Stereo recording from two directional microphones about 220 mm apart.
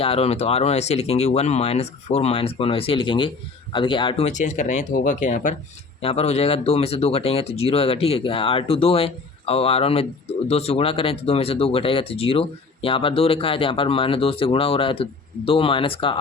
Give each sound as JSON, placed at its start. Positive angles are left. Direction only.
{"t": 0.0, "sound": "speech", "side_deg": 25}